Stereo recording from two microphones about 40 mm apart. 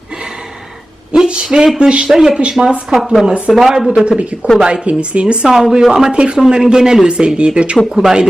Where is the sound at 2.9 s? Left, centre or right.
Centre.